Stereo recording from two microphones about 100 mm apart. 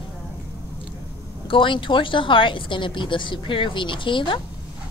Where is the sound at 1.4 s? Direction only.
55° left (ahead or behind).